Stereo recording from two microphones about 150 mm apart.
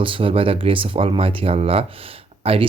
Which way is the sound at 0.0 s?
35° right (ahead or behind).